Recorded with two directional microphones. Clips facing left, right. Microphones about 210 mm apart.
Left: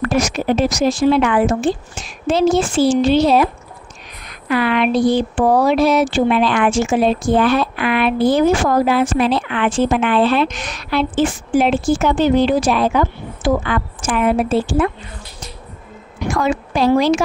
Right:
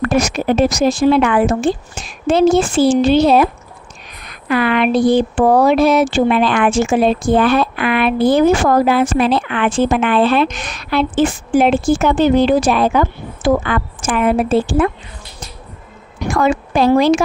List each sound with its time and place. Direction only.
0.1 s speech: 55° right (ahead or behind)
4.5 s speech: 55° right (ahead or behind)
16.3 s speech: 55° right (ahead or behind)